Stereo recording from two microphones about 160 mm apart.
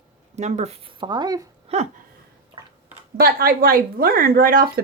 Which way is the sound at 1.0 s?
25° right (ahead or behind).